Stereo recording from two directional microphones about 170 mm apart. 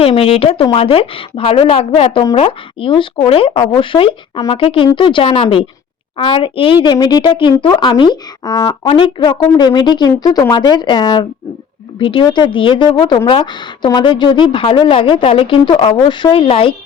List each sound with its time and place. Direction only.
0.0 s a woman's voice: 35° left (ahead or behind)
8.9 s a woman's voice: 30° left (ahead or behind)